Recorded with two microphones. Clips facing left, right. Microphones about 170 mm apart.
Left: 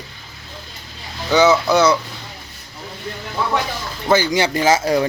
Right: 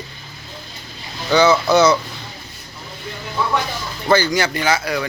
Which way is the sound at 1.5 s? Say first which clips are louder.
Right 1 dB; 5° left (ahead or behind).